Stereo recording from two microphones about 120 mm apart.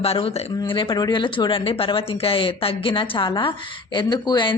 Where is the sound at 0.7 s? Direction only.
40° left (ahead or behind).